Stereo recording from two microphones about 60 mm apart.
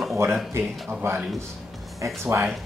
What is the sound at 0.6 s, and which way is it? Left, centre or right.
Speech, right.